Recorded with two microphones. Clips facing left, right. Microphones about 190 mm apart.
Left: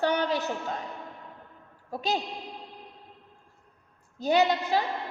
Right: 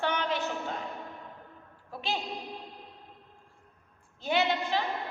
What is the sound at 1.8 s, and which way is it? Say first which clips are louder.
Speech: left 5 dB; 40° left (ahead or behind).